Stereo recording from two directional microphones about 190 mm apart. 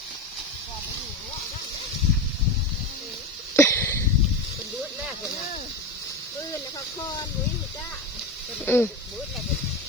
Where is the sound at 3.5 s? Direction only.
15° left (ahead or behind).